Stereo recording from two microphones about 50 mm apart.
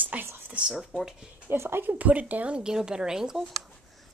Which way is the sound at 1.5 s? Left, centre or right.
Right.